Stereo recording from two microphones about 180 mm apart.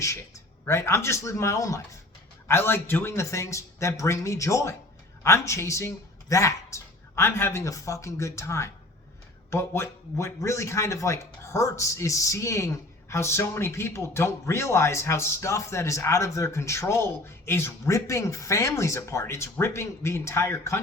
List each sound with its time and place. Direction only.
0.0 s speech: 15° left (ahead or behind)